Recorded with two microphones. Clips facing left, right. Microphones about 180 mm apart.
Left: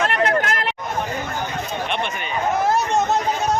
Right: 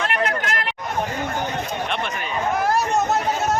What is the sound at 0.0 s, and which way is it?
Chatter, 35° left (ahead or behind).